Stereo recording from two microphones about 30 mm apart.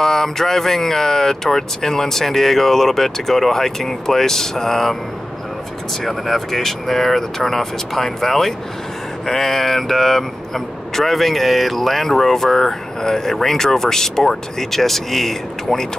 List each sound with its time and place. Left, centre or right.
0.0 s speech: centre
6.0 s speech: centre